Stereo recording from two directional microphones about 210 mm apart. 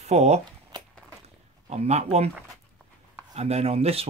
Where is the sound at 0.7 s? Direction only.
20° right (ahead or behind).